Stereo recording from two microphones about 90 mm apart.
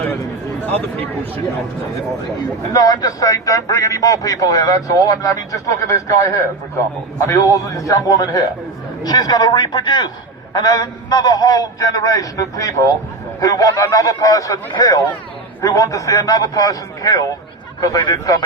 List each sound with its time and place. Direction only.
2.7 s a man's voice: 45° left (ahead or behind)